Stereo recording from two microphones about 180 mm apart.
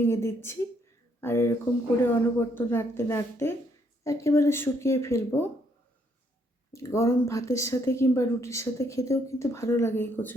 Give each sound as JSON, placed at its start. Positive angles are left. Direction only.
{"t": 0.0, "sound": "speech", "side_deg": 15}
{"t": 6.7, "sound": "speech", "side_deg": 15}